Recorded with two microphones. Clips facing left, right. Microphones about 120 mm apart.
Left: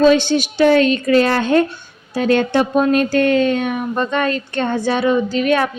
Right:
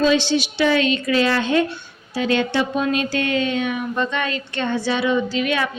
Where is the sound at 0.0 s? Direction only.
50° left (ahead or behind).